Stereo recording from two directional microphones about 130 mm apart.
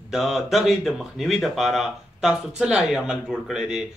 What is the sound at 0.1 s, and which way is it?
Speech, centre (ahead or behind).